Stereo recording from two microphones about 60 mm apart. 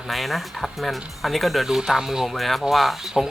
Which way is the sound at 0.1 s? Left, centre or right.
Centre.